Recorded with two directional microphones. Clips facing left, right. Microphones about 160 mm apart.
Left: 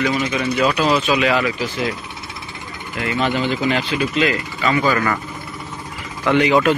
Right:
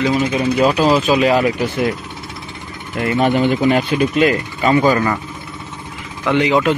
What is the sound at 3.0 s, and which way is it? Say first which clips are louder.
Speech: right 5 dB; 45° right (ahead or behind).